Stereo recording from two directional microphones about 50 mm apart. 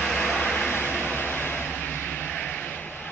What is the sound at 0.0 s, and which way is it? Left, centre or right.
Vehicle, centre.